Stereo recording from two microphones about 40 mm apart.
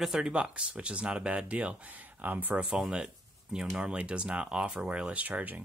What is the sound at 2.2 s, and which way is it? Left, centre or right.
Speech, right.